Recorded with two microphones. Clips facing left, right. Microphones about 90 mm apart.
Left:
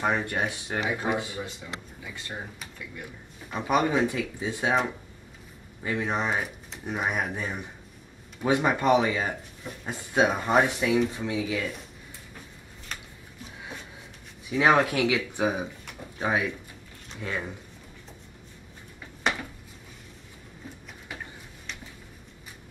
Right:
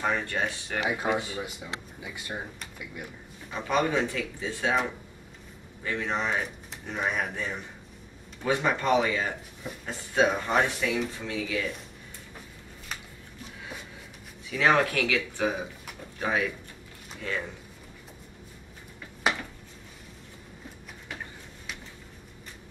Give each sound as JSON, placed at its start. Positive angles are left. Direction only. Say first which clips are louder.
{"t": 0.0, "sound": "speech", "louder": "left 2 dB", "side_deg": 15}
{"t": 1.1, "sound": "speech", "louder": "even", "side_deg": -15}
{"t": 3.5, "sound": "speech", "louder": "left 2 dB", "side_deg": 15}
{"t": 5.9, "sound": "speech", "louder": "left 2 dB", "side_deg": 15}
{"t": 14.5, "sound": "speech", "louder": "left 2 dB", "side_deg": 20}
{"t": 19.2, "sound": "a sound", "louder": "even", "side_deg": -5}